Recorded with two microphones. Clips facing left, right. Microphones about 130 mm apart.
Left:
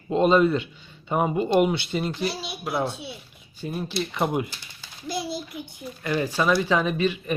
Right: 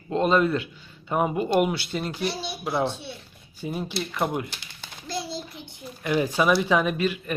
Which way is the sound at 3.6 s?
15° right (ahead or behind).